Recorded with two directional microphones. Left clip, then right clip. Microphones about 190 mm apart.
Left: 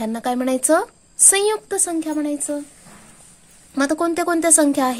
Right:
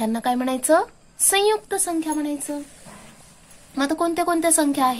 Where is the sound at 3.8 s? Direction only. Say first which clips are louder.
Left 2 dB; 40° left (ahead or behind).